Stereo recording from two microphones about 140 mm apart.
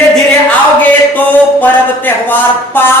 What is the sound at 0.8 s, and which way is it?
Speech, 10° left (ahead or behind).